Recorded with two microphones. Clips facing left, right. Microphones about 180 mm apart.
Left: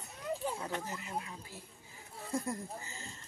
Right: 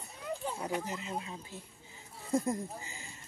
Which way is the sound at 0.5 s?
15° right (ahead or behind).